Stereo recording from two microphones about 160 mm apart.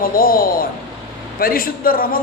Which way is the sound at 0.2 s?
65° left (ahead or behind).